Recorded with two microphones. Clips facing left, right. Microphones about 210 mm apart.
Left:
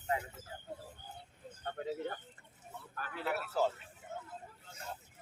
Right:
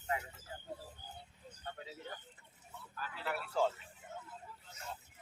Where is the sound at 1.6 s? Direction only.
50° left (ahead or behind).